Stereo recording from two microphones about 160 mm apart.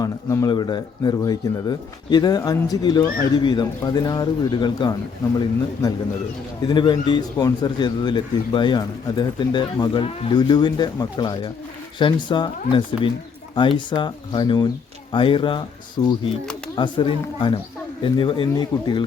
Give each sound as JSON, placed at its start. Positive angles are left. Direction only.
{"t": 0.0, "sound": "speech", "side_deg": 20}
{"t": 6.6, "sound": "speech", "side_deg": 25}